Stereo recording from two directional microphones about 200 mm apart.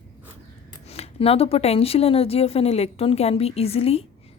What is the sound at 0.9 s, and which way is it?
A woman's voice, 30° left (ahead or behind).